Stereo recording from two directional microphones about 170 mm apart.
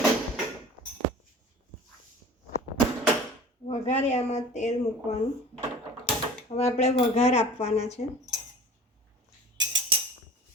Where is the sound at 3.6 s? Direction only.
40° left (ahead or behind).